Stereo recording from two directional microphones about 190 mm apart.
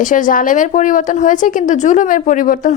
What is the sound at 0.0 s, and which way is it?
A woman's voice, 45° left (ahead or behind).